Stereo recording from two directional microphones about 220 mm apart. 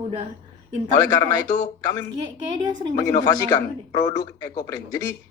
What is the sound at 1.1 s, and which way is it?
Speech, 15° left (ahead or behind).